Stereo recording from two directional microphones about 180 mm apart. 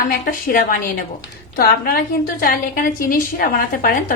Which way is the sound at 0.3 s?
50° left (ahead or behind).